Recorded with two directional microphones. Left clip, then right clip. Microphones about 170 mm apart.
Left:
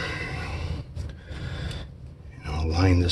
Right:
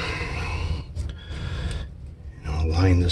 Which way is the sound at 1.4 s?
20° right (ahead or behind).